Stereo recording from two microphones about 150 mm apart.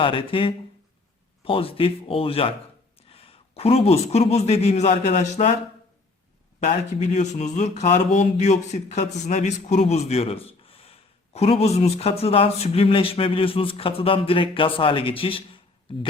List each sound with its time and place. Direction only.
0.0 s a man's voice: 35° left (ahead or behind)
6.6 s speech: 50° left (ahead or behind)